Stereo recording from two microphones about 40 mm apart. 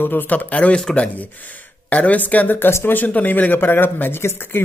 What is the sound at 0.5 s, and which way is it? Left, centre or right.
A man's voice, left.